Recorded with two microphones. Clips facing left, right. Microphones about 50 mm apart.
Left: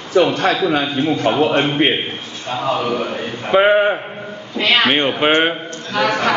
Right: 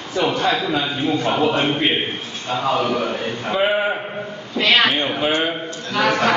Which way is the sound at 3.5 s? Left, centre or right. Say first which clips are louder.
Left 7 dB; left.